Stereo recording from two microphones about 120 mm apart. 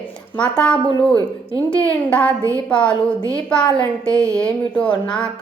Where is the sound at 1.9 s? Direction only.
10° left (ahead or behind).